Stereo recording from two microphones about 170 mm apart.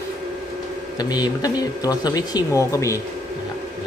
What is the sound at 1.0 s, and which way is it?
Speech, 25° left (ahead or behind).